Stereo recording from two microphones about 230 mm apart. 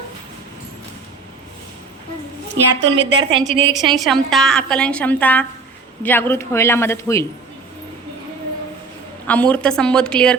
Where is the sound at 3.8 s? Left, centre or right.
Centre.